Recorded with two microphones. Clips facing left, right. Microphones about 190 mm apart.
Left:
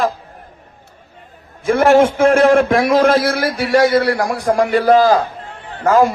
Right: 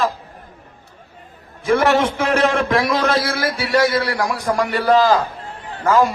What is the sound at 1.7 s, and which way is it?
A man's voice, 50° left (ahead or behind).